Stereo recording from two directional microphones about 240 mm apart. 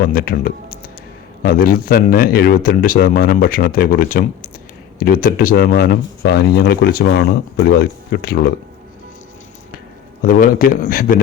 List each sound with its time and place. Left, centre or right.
0.0 s speech: left
10.2 s speech: left